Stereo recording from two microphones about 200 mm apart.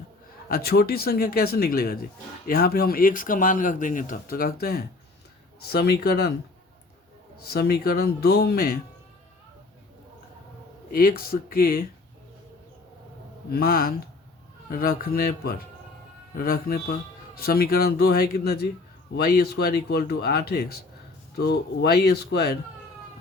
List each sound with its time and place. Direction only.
0.4 s speech: 50° left (ahead or behind)
7.5 s speech: 50° left (ahead or behind)
10.9 s speech: 50° left (ahead or behind)
13.5 s speech: 50° left (ahead or behind)